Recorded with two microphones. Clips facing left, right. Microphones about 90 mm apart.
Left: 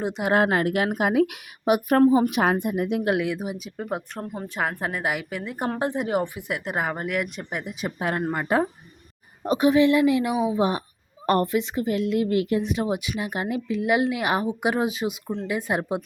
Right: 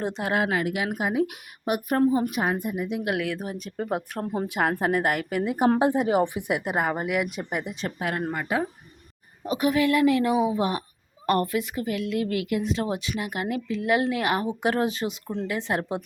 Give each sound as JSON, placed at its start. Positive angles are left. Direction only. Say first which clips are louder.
{"t": 0.3, "sound": "speech", "louder": "left 5 dB", "side_deg": 45}
{"t": 0.9, "sound": "speech", "louder": "left 4 dB", "side_deg": 75}
{"t": 2.3, "sound": "speech", "louder": "left 4 dB", "side_deg": 75}
{"t": 3.0, "sound": "a woman's voice", "louder": "left 2 dB", "side_deg": 25}
{"t": 3.3, "sound": "a woman's voice", "louder": "even", "side_deg": 10}
{"t": 6.2, "sound": "speech", "louder": "right 3 dB", "side_deg": -15}
{"t": 6.7, "sound": "a woman's voice", "louder": "left 1 dB", "side_deg": -5}
{"t": 7.9, "sound": "a woman's voice", "louder": "left 3 dB", "side_deg": 30}
{"t": 9.5, "sound": "a woman's voice", "louder": "left 4 dB", "side_deg": 25}
{"t": 12.6, "sound": "speech", "louder": "left 1 dB", "side_deg": 15}